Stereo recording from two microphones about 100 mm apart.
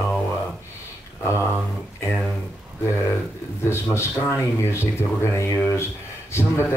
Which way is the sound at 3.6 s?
25° left (ahead or behind).